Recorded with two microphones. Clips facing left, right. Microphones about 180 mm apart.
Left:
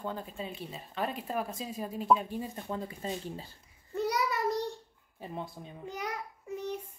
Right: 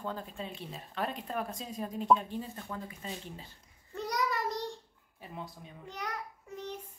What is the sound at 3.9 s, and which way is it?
Child singing, 5° left (ahead or behind).